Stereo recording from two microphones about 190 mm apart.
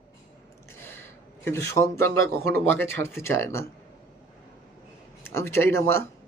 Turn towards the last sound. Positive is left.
turn(degrees=10)  # may be behind; listen again after turning